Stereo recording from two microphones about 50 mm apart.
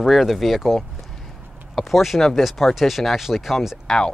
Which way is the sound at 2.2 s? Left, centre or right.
Centre.